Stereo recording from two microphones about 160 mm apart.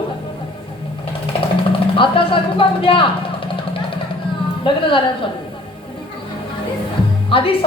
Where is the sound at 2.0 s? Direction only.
35° left (ahead or behind).